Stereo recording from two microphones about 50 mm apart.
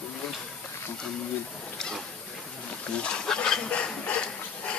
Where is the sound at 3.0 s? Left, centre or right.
Centre.